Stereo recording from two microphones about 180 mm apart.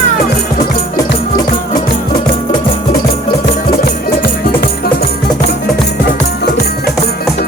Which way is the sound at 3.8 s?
55° left (ahead or behind).